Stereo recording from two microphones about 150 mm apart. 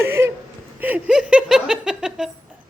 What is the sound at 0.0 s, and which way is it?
A woman's voice, 15° right (ahead or behind).